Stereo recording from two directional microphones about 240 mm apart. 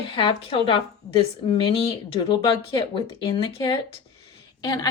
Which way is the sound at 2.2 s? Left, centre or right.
Left.